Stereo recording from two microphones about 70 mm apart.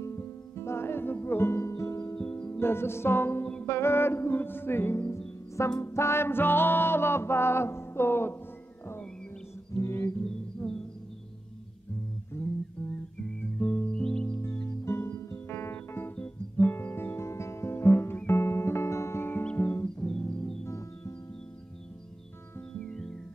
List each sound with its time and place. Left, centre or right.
0.0 s music: left
2.1 s music: left
9.8 s music: left
13.6 s music: centre
14.4 s music: left
20.6 s music: left
22.8 s music: centre